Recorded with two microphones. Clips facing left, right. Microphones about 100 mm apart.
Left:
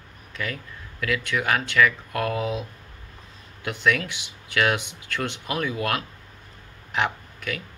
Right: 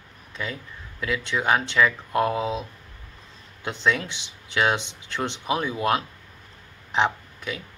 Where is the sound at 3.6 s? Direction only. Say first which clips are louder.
Left 1 dB; 25° right (ahead or behind).